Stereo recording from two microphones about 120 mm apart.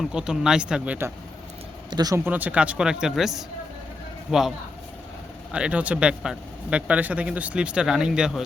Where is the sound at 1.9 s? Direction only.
35° right (ahead or behind).